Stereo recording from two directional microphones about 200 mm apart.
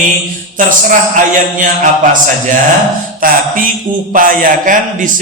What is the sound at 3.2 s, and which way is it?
A man's voice, 45° right (ahead or behind).